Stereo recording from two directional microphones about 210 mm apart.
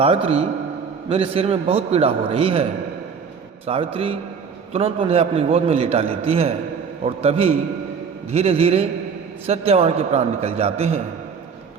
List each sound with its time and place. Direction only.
0.0 s a man's voice: 25° right (ahead or behind)
3.7 s a man's voice: 30° right (ahead or behind)